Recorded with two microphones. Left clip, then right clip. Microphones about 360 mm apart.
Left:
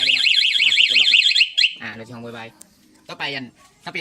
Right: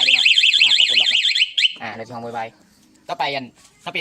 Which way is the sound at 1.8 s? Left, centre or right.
Centre.